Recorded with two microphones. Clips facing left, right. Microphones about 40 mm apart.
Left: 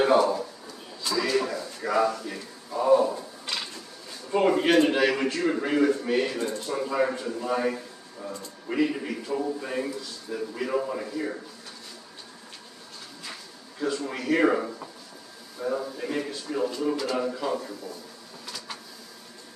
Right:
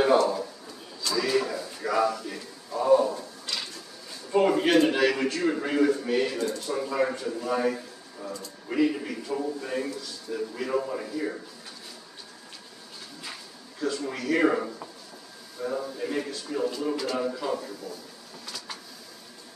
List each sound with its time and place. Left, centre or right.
0.0 s a sound: centre
1.4 s speech: centre
4.3 s a man's voice: centre
6.3 s speech: left
6.6 s a man's voice: centre
13.7 s a man's voice: centre